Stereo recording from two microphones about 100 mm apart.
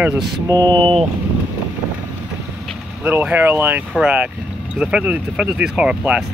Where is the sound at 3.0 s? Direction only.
15° right (ahead or behind).